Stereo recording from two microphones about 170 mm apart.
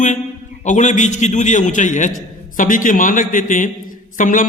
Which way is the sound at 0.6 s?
45° left (ahead or behind).